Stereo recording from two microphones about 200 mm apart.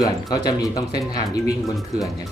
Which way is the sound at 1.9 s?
35° right (ahead or behind).